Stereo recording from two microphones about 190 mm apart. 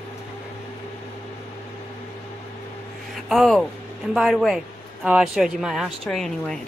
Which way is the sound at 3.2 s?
Centre (ahead or behind).